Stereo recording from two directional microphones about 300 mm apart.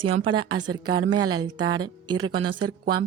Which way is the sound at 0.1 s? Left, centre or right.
Centre.